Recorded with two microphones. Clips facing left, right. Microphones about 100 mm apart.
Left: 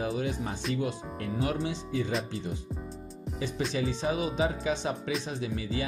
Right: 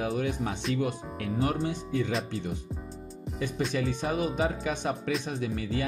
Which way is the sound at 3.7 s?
60° right (ahead or behind).